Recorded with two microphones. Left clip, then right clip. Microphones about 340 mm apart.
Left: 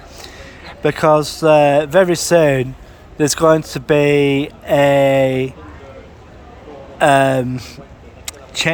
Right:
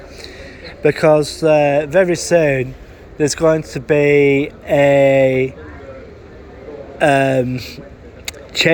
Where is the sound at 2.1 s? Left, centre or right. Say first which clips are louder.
Left 1 dB; left.